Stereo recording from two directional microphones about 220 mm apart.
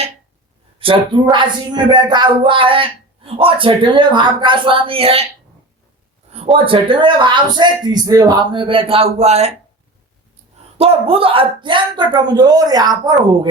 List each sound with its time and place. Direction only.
0.8 s speech: 25° right (ahead or behind)
6.3 s speech: 25° right (ahead or behind)
10.8 s speech: 25° right (ahead or behind)